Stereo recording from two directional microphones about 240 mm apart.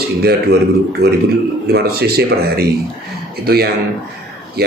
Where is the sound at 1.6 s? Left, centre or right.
Right.